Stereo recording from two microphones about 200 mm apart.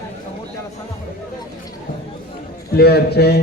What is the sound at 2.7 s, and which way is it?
Speech, 55° left (ahead or behind).